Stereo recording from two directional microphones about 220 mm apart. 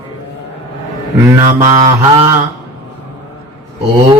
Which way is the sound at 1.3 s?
15° right (ahead or behind).